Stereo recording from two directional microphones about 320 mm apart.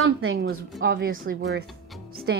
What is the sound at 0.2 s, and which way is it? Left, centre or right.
A woman's voice, right.